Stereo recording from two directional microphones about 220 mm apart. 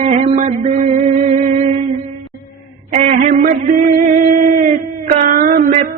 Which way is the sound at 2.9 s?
35° right (ahead or behind).